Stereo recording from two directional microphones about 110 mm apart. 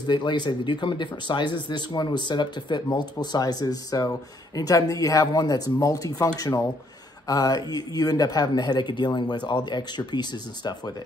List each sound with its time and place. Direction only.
0.0 s speech: 45° left (ahead or behind)